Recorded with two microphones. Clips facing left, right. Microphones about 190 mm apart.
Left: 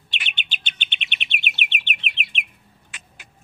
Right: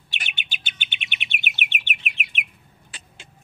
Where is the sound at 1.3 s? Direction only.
45° right (ahead or behind).